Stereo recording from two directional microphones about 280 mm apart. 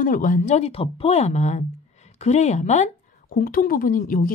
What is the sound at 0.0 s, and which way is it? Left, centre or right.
Speech, left.